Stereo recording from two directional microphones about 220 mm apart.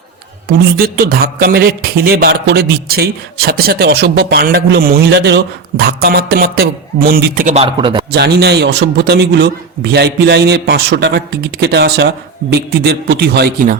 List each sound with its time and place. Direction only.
0.4 s speech: 45° right (ahead or behind); by 8.0 s 20° right (ahead or behind)
8.1 s speech: 50° right (ahead or behind)